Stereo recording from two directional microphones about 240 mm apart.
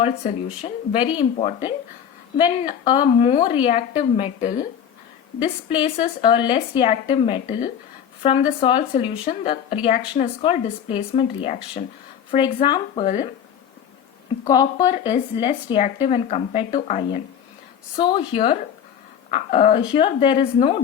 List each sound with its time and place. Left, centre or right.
0.0 s speech: left
5.6 s speech: left
14.4 s speech: centre
19.3 s speech: left